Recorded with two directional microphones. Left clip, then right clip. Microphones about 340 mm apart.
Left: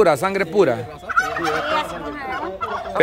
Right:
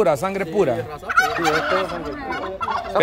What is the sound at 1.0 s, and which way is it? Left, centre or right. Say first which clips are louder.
Fowl: right 2 dB; centre.